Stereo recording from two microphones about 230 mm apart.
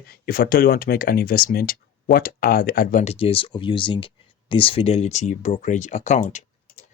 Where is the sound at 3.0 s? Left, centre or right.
Left.